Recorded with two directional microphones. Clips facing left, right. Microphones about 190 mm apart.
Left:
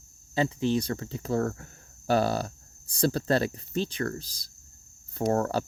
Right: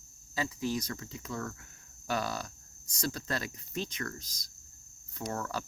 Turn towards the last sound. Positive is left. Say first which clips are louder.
# left 11 dB
turn(degrees=40)  # may be behind; listen again after turning